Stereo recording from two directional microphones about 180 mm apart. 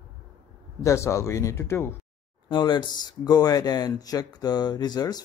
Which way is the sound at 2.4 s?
25° left (ahead or behind).